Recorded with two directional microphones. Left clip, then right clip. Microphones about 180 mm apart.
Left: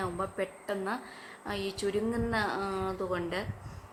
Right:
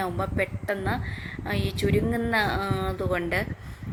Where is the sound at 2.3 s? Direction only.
15° right (ahead or behind).